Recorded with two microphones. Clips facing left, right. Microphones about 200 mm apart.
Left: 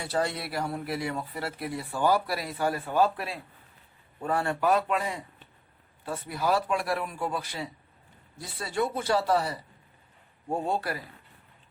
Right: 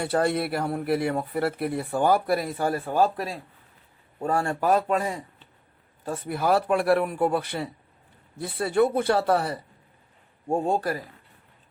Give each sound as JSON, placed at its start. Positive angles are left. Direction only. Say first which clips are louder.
{"t": 0.0, "sound": "a man's voice", "louder": "right 6 dB", "side_deg": -55}
{"t": 6.1, "sound": "speech", "louder": "right 4 dB", "side_deg": -55}
{"t": 10.5, "sound": "a man's voice", "louder": "right 5 dB", "side_deg": -45}